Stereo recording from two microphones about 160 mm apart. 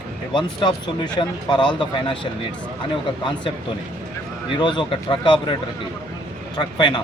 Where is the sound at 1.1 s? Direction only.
25° left (ahead or behind).